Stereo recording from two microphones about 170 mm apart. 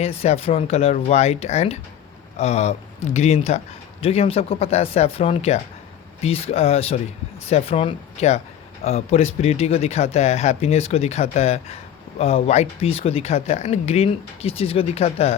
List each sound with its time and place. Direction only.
0.0 s speech: 35° left (ahead or behind)